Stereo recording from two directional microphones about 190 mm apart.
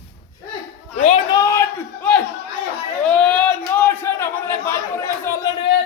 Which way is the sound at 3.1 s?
5° left (ahead or behind).